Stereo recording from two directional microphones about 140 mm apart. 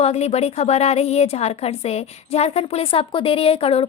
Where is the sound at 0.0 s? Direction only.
50° left (ahead or behind).